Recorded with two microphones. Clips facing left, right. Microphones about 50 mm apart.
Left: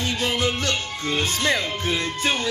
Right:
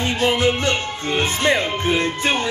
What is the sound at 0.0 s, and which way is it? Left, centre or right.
Music, right.